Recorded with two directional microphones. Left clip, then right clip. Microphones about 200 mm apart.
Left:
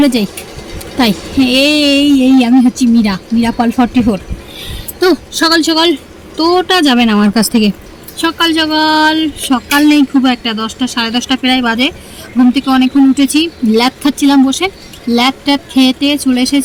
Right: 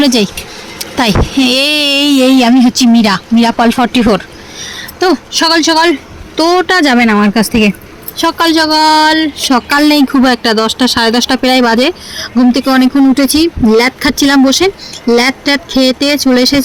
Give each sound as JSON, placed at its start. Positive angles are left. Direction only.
{"t": 0.0, "sound": "speech", "side_deg": -30}
{"t": 5.1, "sound": "speech", "side_deg": -20}
{"t": 7.2, "sound": "speech", "side_deg": 0}
{"t": 8.2, "sound": "speech", "side_deg": -25}